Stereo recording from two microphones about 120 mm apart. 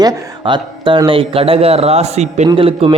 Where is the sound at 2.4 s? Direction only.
50° right (ahead or behind).